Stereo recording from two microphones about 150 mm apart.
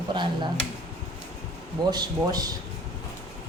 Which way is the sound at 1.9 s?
25° right (ahead or behind).